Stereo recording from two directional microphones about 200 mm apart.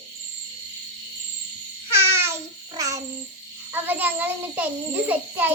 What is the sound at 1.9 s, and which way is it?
Babbling, 10° right (ahead or behind).